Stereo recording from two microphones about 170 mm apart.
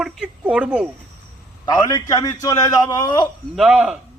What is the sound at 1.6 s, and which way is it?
A man's voice, 25° left (ahead or behind).